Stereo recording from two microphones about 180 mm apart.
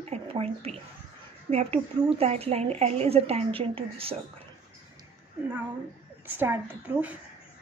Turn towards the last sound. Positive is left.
turn(degrees=-10)  # may be behind; listen again after turning